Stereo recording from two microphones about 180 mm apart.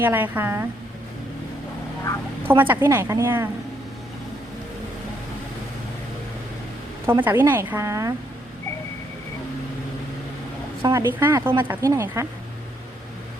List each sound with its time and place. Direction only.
0.0 s speech: 10° right (ahead or behind)
2.5 s speech: 10° right (ahead or behind)
7.1 s speech: 10° right (ahead or behind)
10.8 s speech: 15° right (ahead or behind)